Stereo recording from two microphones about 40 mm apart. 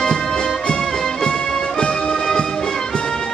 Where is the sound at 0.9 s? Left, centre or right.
Centre.